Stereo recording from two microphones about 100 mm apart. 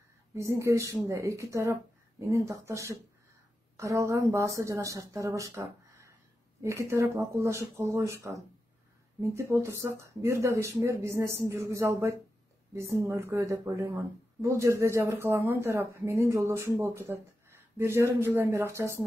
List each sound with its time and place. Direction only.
0.4 s a woman's voice: 30° right (ahead or behind)